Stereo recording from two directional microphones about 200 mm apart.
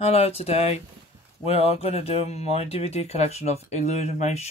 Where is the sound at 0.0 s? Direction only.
30° left (ahead or behind).